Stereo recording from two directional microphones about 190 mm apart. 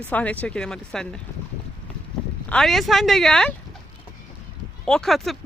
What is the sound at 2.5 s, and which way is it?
Speech, centre (ahead or behind).